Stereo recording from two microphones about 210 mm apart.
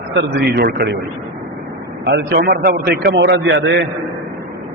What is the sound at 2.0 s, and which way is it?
A man's voice, 55° right (ahead or behind).